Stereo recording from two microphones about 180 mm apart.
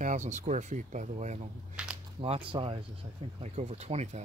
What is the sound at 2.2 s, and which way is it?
Speech, 30° right (ahead or behind).